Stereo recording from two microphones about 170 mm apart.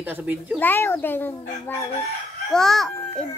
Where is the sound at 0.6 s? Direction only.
10° left (ahead or behind).